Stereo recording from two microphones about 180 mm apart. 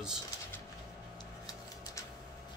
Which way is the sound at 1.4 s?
20° left (ahead or behind).